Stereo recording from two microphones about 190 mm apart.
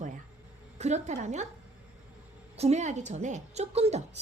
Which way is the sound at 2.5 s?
35° right (ahead or behind).